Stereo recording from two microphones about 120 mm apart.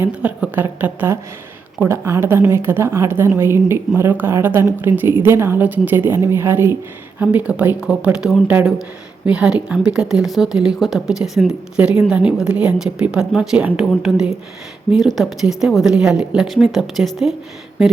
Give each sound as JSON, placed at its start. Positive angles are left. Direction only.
{"t": 0.0, "sound": "a woman's voice", "side_deg": -10}